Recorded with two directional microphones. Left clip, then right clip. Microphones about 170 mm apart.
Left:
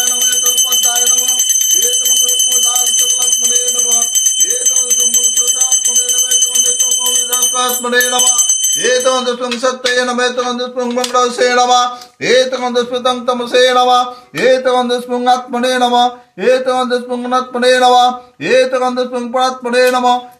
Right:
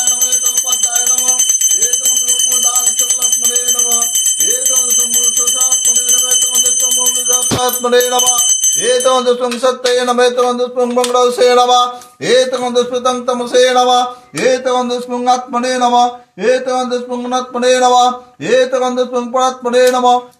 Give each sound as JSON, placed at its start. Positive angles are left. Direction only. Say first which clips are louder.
{"t": 3.4, "sound": "bell", "louder": "left 1 dB", "side_deg": -70}
{"t": 6.2, "sound": "music", "louder": "left 1 dB", "side_deg": -75}
{"t": 8.7, "sound": "speech", "louder": "even", "side_deg": -45}
{"t": 12.3, "sound": "speech", "louder": "even", "side_deg": -25}
{"t": 14.5, "sound": "speech", "louder": "left 3 dB", "side_deg": -10}
{"t": 18.5, "sound": "speech", "louder": "even", "side_deg": -30}